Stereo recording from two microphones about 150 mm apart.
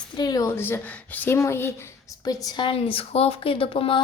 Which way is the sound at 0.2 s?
25° left (ahead or behind).